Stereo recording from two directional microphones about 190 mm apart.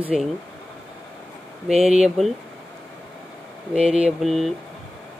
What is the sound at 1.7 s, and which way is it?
Speech, 35° right (ahead or behind).